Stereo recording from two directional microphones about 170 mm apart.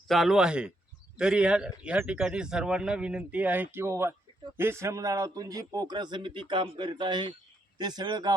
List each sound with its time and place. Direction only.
0.1 s speech: centre (ahead or behind); by 8.3 s 25° right (ahead or behind)